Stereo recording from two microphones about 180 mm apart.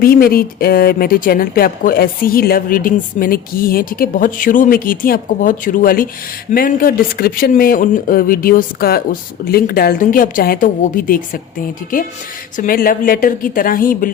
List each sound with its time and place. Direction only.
0.0 s speech: 55° left (ahead or behind)
12.5 s speech: 55° left (ahead or behind)